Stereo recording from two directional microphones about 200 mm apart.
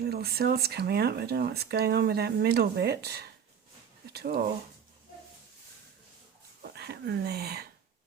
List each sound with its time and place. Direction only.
0.0 s speech: 50° right (ahead or behind)
6.6 s speech: 55° right (ahead or behind)